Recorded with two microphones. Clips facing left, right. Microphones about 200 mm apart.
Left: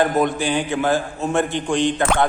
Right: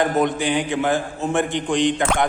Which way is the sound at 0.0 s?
20° right (ahead or behind).